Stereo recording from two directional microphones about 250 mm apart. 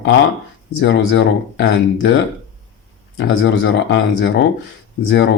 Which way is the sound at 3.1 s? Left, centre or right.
Left.